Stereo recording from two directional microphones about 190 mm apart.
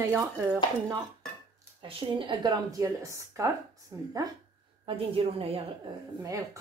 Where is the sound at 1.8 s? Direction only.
25° right (ahead or behind).